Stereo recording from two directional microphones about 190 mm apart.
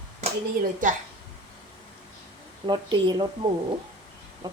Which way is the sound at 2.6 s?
25° right (ahead or behind).